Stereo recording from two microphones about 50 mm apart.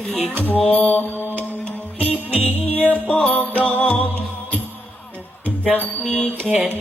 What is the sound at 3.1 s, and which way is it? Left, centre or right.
Mantra, left.